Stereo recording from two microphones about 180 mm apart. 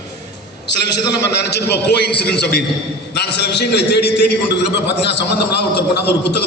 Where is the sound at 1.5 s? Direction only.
65° left (ahead or behind).